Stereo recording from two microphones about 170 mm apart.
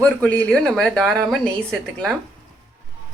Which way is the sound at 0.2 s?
10° left (ahead or behind).